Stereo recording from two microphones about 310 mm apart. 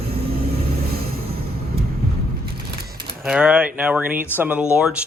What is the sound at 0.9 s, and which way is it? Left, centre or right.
Music, right.